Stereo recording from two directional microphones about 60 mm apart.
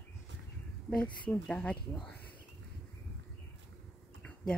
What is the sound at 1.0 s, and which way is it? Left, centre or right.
Speech, left.